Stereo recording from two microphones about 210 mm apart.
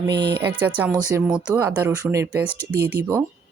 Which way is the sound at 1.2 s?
5° right (ahead or behind).